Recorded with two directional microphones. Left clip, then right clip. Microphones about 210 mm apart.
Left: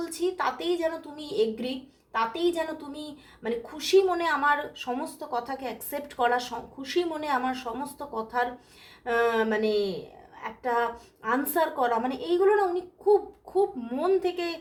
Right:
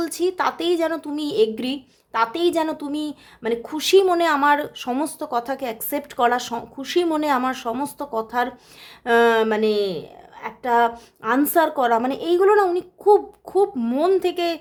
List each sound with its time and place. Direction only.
0.0 s a woman's voice: 50° right (ahead or behind)